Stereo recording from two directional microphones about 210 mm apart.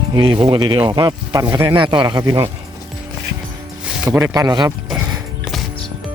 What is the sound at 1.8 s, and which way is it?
Speech, 20° right (ahead or behind).